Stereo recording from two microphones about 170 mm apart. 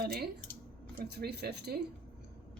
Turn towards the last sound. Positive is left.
turn(degrees=-70)  # may be behind; listen again after turning